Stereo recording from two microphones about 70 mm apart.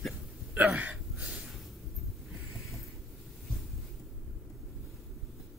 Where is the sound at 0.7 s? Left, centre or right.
Centre.